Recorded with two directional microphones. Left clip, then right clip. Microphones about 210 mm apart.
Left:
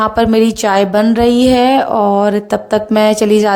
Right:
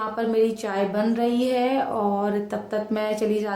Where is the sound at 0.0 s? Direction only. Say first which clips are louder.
Left 11 dB; 45° left (ahead or behind).